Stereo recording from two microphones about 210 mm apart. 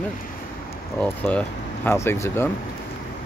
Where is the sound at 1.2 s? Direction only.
10° left (ahead or behind).